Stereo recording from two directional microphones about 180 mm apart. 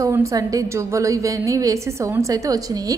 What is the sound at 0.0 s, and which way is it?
A woman's voice, 15° right (ahead or behind).